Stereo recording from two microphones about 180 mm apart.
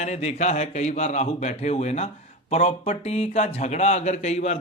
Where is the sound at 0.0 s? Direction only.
40° left (ahead or behind).